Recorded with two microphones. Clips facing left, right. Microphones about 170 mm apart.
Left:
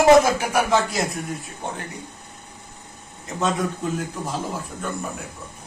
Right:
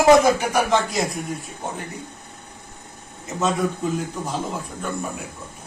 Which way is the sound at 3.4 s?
Centre (ahead or behind).